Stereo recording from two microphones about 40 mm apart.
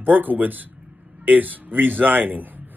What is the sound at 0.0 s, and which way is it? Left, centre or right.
Speech, right.